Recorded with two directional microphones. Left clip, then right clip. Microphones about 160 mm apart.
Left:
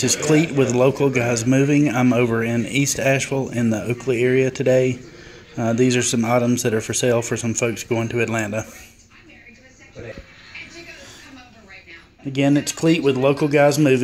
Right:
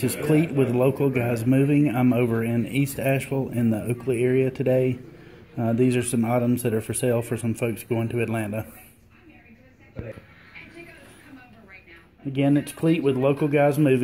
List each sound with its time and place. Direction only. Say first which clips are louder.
0.0 s a man's voice: left 5 dB; 5° left (ahead or behind)
12.4 s speech: left 4 dB; 5° left (ahead or behind)